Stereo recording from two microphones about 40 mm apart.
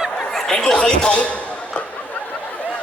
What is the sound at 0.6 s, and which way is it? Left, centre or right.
A man's voice, centre.